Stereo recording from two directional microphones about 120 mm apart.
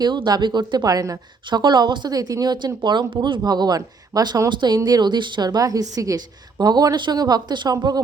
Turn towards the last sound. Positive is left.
turn(degrees=-35)  # may be behind; listen again after turning